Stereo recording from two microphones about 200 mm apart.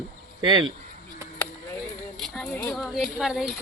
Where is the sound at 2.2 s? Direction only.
5° left (ahead or behind).